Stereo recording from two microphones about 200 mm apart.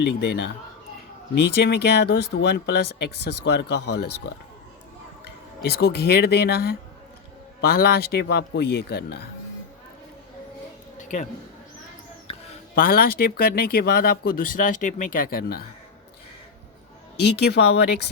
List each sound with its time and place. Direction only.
0.0 s speech: 55° left (ahead or behind)
5.8 s speech: 55° left (ahead or behind)
10.9 s a sound: 40° left (ahead or behind)
12.3 s music: 30° left (ahead or behind)
12.7 s speech: 45° left (ahead or behind)
17.2 s speech: 55° left (ahead or behind)